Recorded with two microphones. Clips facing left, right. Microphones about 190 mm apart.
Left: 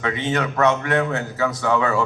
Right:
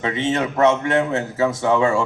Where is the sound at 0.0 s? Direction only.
25° right (ahead or behind).